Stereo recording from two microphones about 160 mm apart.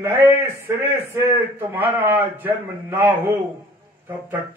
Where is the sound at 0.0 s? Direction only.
15° right (ahead or behind).